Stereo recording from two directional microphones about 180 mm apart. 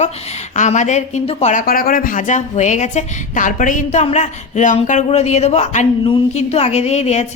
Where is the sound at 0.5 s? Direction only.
45° left (ahead or behind).